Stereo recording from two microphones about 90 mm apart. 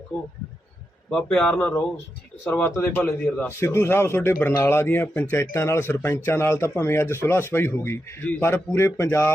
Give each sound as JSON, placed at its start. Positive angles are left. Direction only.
{"t": 1.1, "sound": "speech", "side_deg": 5}
{"t": 1.5, "sound": "a man's voice", "side_deg": 20}